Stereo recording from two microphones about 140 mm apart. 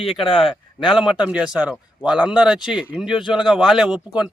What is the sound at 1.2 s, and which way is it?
Speech, 5° right (ahead or behind).